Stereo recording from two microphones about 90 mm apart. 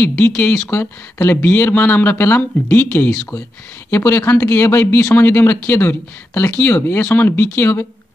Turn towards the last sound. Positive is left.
turn(degrees=25)  # may be behind; listen again after turning